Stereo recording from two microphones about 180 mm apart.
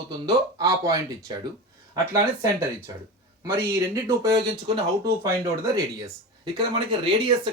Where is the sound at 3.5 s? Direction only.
15° right (ahead or behind).